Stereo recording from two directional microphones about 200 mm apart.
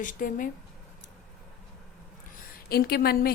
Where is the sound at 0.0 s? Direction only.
40° left (ahead or behind).